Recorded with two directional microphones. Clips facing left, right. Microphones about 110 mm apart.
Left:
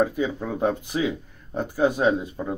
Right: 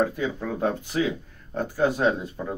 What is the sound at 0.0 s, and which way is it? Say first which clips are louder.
Speech: left 2 dB; 15° left (ahead or behind).